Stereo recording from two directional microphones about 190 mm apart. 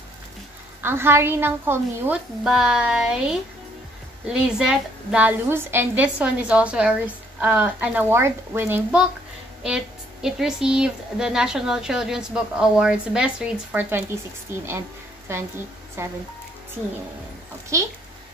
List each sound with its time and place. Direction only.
0.8 s a woman's voice: 10° right (ahead or behind)
10.2 s a woman's voice: 5° right (ahead or behind)
17.7 s a woman's voice: 15° right (ahead or behind)